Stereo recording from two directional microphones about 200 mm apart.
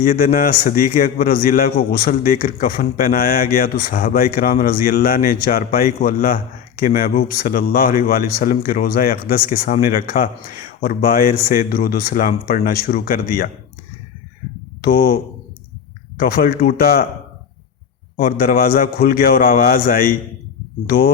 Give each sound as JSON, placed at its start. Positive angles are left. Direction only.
{"t": 0.0, "sound": "a man's voice", "side_deg": 45}
{"t": 14.8, "sound": "a man's voice", "side_deg": 45}
{"t": 18.2, "sound": "a man's voice", "side_deg": 45}